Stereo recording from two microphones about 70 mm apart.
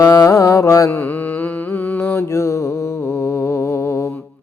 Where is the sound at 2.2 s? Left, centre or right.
Left.